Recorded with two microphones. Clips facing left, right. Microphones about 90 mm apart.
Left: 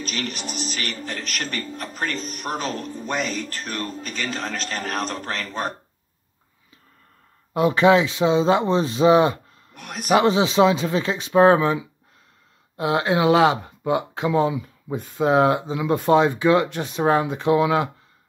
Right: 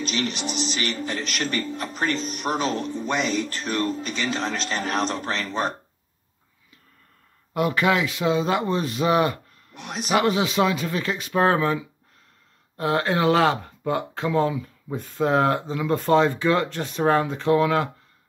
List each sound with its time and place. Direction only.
0.0 s speech: 45° left (ahead or behind)
7.5 s speech: 25° left (ahead or behind)
9.8 s speech: 50° left (ahead or behind)
10.1 s speech: 25° left (ahead or behind)